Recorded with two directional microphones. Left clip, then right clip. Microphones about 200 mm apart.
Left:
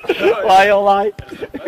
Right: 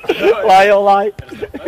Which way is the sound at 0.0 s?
55° right (ahead or behind).